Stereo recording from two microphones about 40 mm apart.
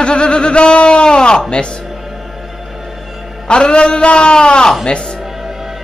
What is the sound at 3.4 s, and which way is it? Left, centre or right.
Speech, left.